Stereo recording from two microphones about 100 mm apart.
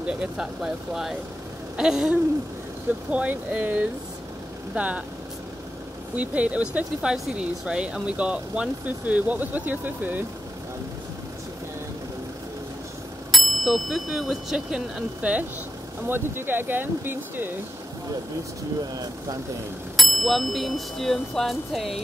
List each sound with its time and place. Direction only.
0.0 s speech: 10° right (ahead or behind)
6.1 s speech: 15° right (ahead or behind)
13.3 s speech: centre (ahead or behind)
16.1 s speech: 20° right (ahead or behind)
20.0 s speech: centre (ahead or behind)